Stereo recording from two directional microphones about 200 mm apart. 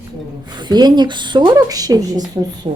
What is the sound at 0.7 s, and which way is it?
A woman's voice, 20° right (ahead or behind).